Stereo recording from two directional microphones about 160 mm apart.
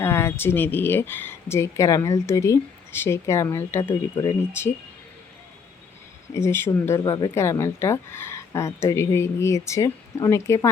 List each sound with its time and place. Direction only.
0.0 s speech: 15° left (ahead or behind)
4.1 s speech: 25° left (ahead or behind)
6.3 s speech: 15° left (ahead or behind)